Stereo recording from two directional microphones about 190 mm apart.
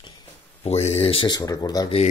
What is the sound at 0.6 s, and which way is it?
Speech, 35° left (ahead or behind).